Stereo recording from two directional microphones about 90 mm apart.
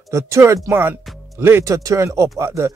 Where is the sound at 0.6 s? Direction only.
25° right (ahead or behind).